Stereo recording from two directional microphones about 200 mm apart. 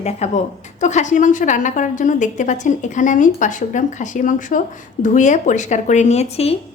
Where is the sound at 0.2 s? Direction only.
35° left (ahead or behind).